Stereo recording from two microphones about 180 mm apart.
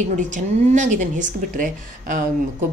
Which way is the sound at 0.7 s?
45° right (ahead or behind).